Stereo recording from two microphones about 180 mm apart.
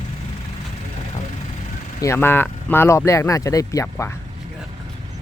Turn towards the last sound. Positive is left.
turn(degrees=15)  # may be behind; listen again after turning